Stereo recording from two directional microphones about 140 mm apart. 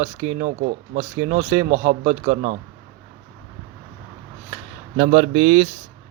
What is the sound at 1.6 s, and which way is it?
Speech, 90° right.